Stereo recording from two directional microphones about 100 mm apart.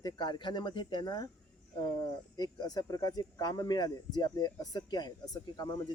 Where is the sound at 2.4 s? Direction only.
40° left (ahead or behind).